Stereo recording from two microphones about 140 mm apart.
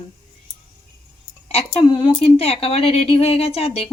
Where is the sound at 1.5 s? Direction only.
45° left (ahead or behind).